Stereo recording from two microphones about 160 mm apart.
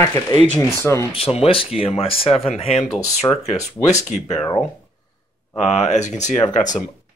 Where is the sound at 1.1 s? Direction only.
40° left (ahead or behind).